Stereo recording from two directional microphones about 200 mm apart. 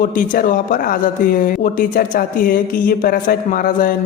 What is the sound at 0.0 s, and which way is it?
A man's voice, 45° left (ahead or behind).